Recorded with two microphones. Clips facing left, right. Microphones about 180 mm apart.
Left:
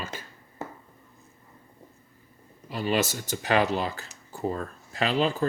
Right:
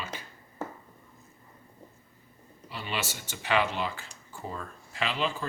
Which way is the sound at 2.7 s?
45° left (ahead or behind).